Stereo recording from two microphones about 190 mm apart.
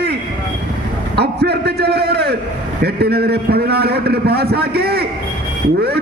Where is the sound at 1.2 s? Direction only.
60° right (ahead or behind).